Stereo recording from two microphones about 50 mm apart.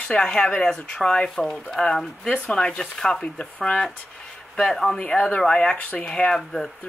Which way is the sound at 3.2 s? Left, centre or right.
Left.